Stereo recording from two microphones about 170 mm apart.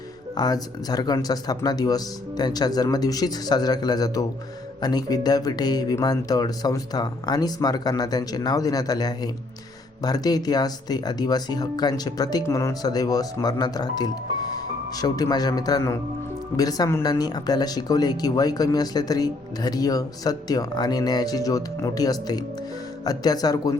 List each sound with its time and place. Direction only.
0.3 s speech: 25° left (ahead or behind)